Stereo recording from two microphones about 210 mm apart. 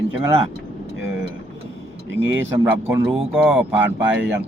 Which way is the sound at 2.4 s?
10° right (ahead or behind).